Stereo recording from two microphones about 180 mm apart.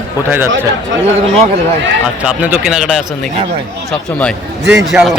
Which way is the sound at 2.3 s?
10° right (ahead or behind).